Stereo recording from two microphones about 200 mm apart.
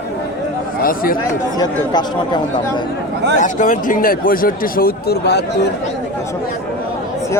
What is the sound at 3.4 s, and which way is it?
Speech, 40° left (ahead or behind).